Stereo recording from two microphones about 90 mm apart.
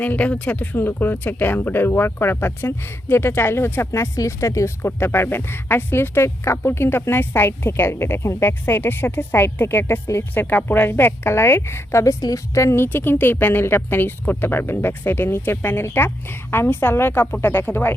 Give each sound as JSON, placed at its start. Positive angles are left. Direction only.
{"t": 0.0, "sound": "speech", "side_deg": 15}